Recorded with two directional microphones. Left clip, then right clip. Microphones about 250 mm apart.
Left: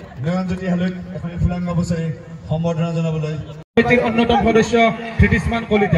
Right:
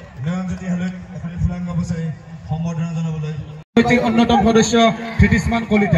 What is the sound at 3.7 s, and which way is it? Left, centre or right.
A man's voice, centre.